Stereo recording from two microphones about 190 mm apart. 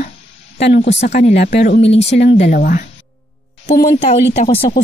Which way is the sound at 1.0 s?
35° left (ahead or behind).